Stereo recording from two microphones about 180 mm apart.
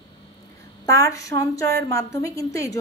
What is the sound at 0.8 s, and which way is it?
A woman's voice, 20° left (ahead or behind).